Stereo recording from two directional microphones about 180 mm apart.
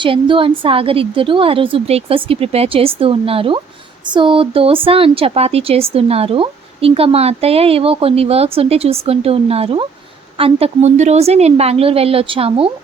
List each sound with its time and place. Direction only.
0.0 s a woman's voice: 30° right (ahead or behind)